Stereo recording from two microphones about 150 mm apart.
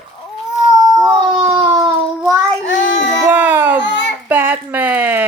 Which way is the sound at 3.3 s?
10° right (ahead or behind).